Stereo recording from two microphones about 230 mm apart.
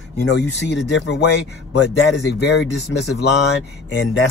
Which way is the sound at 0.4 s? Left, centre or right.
Left.